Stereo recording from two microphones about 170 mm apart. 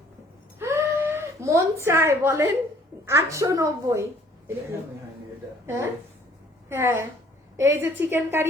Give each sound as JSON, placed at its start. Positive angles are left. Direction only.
{"t": 0.6, "sound": "a sound", "side_deg": -15}
{"t": 3.1, "sound": "a woman's voice", "side_deg": -15}
{"t": 5.6, "sound": "a woman's voice", "side_deg": -15}